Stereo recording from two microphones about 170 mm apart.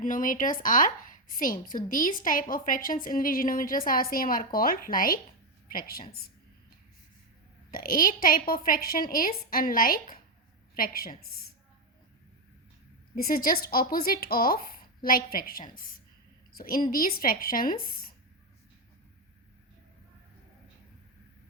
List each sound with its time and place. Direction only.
0.0 s speech: 50° left (ahead or behind)
7.7 s speech: 60° left (ahead or behind)
13.1 s speech: 60° left (ahead or behind)